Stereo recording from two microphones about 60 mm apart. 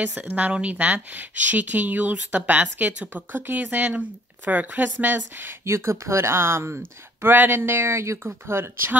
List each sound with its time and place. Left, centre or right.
0.0 s speech: right
5.7 s speech: right